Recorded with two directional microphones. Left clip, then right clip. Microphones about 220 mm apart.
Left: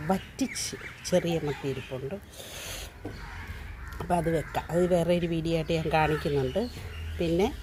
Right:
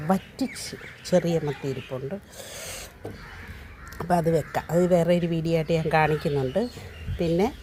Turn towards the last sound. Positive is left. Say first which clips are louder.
# right 3 dB
turn(degrees=-20)  # may be behind; listen again after turning